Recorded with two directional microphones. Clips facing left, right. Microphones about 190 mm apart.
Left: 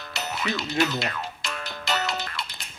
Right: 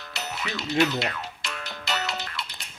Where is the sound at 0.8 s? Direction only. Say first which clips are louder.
Right 3 dB; 45° left (ahead or behind).